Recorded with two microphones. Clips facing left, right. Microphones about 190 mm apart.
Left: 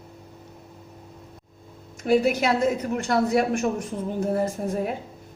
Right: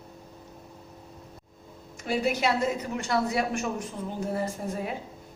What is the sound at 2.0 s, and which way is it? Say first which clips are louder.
A woman's voice: left 6 dB; 55° left (ahead or behind).